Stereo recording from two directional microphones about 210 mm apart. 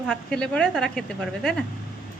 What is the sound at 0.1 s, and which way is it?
A woman's voice, 5° left (ahead or behind).